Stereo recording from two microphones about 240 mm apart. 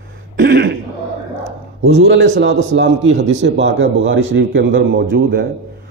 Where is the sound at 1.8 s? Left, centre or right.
Right.